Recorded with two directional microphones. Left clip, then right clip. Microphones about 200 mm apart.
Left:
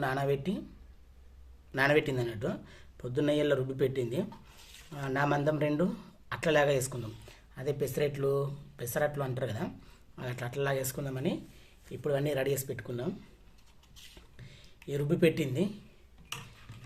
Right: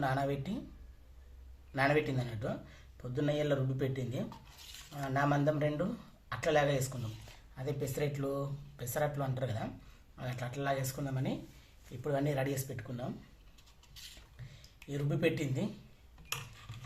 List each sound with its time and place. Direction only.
0.0 s speech: 50° left (ahead or behind)
1.7 s speech: 55° left (ahead or behind)
14.8 s speech: 55° left (ahead or behind)